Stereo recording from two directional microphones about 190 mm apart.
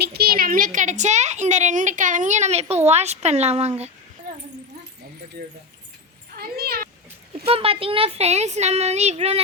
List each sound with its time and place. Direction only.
0.0 s a woman's voice: 55° right (ahead or behind); by 3.7 s 35° right (ahead or behind)
6.3 s a sound: 55° right (ahead or behind)
7.4 s a woman's voice: 30° right (ahead or behind)